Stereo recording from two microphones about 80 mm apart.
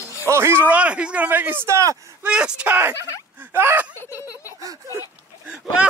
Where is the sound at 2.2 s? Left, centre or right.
Centre.